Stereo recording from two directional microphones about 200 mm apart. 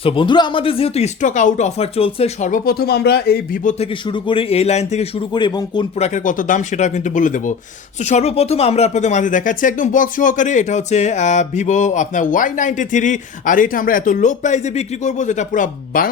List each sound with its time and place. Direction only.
0.0 s speech: 25° left (ahead or behind)
4.0 s speech: 25° left (ahead or behind)
5.3 s speech: 20° left (ahead or behind)
6.0 s speech: 40° left (ahead or behind)